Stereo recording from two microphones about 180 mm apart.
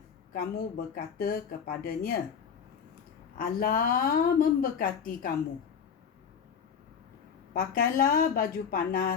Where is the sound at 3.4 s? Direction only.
55° left (ahead or behind).